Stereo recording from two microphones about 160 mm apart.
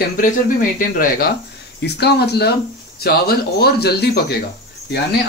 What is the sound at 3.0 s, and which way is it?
Speech, 80° left.